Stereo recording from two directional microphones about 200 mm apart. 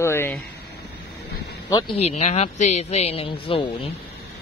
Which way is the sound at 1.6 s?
20° left (ahead or behind).